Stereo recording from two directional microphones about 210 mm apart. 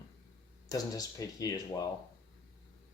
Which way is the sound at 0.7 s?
15° left (ahead or behind).